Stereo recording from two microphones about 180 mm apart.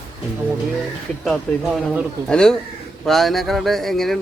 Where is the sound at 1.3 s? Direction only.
Centre (ahead or behind).